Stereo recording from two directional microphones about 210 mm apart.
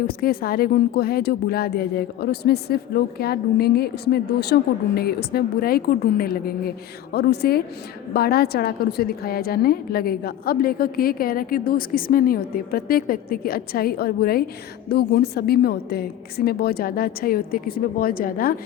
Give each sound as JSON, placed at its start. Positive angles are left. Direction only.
{"t": 0.1, "sound": "a woman's voice", "side_deg": 45}